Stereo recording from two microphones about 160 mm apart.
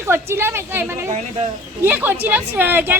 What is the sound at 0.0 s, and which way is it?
A woman's voice, 15° right (ahead or behind).